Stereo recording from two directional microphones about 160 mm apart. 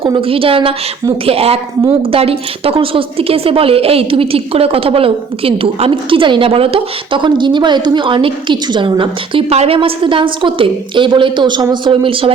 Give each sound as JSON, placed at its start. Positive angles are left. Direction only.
{"t": 0.0, "sound": "a woman's voice", "side_deg": -35}